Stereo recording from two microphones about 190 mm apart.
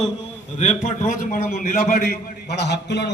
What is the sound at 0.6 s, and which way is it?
A man's voice, 35° left (ahead or behind).